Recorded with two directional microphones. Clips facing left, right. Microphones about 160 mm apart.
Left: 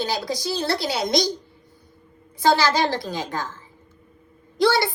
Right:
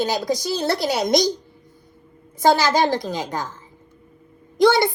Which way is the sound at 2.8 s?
20° right (ahead or behind).